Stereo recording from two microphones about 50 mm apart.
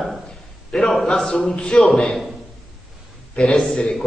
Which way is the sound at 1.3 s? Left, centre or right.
Centre.